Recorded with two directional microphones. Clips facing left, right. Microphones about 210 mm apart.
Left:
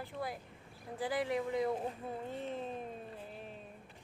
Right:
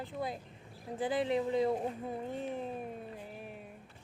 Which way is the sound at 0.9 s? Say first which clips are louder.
Right 3 dB; 20° right (ahead or behind).